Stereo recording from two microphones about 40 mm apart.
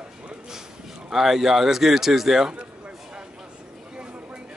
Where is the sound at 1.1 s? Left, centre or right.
Centre.